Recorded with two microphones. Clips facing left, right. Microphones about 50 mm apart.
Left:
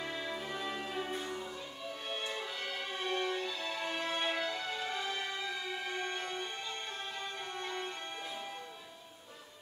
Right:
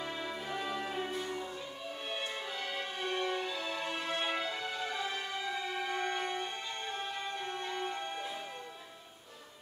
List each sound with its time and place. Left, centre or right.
0.1 s music: centre
2.3 s music: centre